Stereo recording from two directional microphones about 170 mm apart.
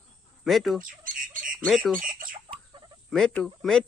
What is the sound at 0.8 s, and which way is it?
Squawk, 55° right (ahead or behind).